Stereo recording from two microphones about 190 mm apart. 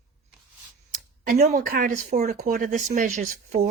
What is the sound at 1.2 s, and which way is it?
Speech, 50° right (ahead or behind).